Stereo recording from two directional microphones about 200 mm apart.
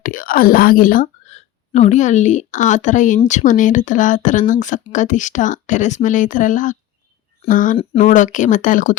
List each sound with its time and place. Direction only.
0.0 s a woman's voice: 45° left (ahead or behind)